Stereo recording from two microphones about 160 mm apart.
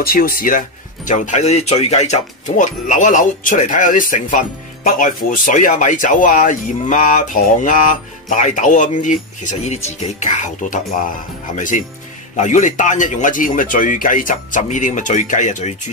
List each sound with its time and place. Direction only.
0.0 s speech: 65° left (ahead or behind); by 15.7 s 50° left (ahead or behind)